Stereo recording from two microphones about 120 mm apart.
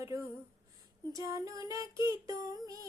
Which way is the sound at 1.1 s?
30° right (ahead or behind).